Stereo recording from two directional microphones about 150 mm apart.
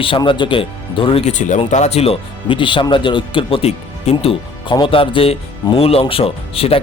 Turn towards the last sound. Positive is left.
turn(degrees=40)  # may be behind; listen again after turning